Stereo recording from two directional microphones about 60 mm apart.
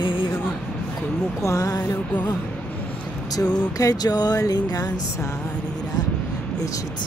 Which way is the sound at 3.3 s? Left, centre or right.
Left.